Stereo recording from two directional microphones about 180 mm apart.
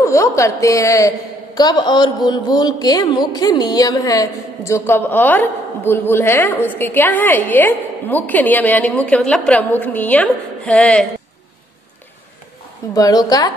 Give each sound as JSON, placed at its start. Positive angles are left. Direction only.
{"t": 0.0, "sound": "a woman's voice", "side_deg": 15}
{"t": 12.9, "sound": "a woman's voice", "side_deg": 20}